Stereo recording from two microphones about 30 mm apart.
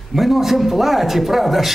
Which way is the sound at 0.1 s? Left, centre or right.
Centre.